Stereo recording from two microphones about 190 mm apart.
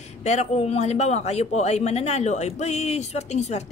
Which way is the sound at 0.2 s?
35° left (ahead or behind).